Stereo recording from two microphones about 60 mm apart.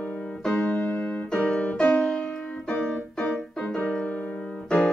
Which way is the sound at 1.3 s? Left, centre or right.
Centre.